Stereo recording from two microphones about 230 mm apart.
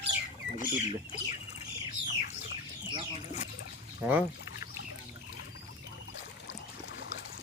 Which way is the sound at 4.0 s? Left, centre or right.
Centre.